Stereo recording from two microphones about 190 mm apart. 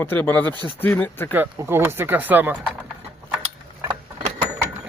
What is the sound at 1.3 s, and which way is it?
Speech, 10° right (ahead or behind).